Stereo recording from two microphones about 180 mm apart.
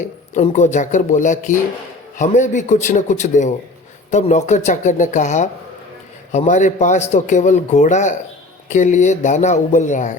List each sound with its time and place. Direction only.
0.0 s a man's voice: 40° left (ahead or behind)